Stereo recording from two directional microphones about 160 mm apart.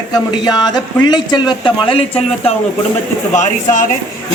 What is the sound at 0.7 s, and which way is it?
Speech, 25° left (ahead or behind).